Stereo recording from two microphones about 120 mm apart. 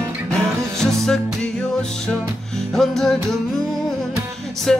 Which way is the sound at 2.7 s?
5° left (ahead or behind).